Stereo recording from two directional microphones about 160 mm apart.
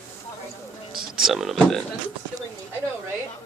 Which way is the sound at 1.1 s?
Centre (ahead or behind).